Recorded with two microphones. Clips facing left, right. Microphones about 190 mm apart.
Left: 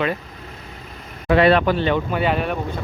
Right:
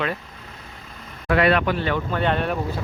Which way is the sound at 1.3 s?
30° left (ahead or behind).